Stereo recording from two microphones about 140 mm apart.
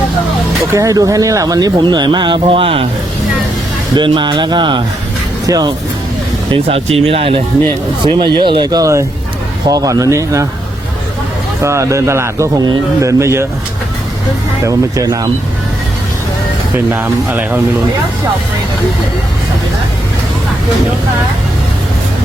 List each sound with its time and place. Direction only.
0.7 s speech: 25° right (ahead or behind); by 2.8 s 40° right (ahead or behind)
3.9 s speech: 35° right (ahead or behind)
6.5 s speech: 45° right (ahead or behind); by 10.4 s 20° right (ahead or behind)
11.6 s speech: 20° right (ahead or behind)
14.6 s speech: 25° right (ahead or behind)
16.7 s speech: 15° right (ahead or behind)